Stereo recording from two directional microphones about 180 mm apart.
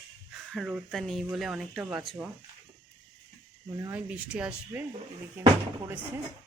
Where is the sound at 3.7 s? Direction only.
20° right (ahead or behind).